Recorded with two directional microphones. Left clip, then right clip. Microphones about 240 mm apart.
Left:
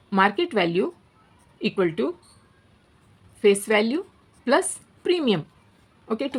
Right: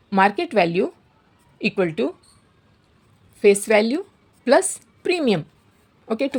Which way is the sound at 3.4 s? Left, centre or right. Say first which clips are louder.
Right 4 dB; right.